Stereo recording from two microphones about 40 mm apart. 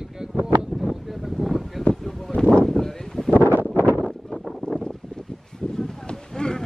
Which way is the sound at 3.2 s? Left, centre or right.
Left.